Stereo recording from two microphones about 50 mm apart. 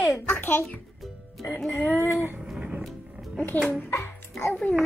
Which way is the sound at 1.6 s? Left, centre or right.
Left.